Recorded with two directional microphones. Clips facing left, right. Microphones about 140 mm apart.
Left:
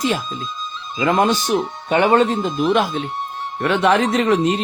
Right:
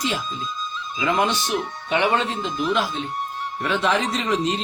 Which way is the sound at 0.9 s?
50° left (ahead or behind).